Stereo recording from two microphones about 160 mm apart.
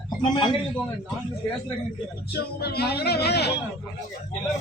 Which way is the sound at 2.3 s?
80° left.